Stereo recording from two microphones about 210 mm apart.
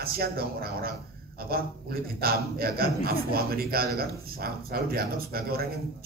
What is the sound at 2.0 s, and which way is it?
A man's voice, 45° right (ahead or behind).